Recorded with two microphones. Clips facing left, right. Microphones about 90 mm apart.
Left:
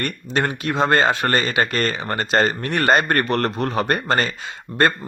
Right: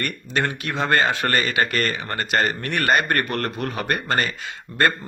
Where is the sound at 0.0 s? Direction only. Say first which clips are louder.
Left 2 dB; 25° left (ahead or behind).